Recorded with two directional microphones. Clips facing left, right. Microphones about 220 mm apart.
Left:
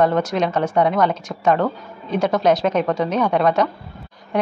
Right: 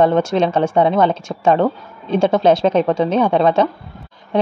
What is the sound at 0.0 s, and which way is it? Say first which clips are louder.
Speech: right 4 dB; 25° right (ahead or behind).